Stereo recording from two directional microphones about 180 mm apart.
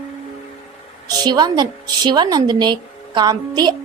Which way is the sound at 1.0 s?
20° right (ahead or behind).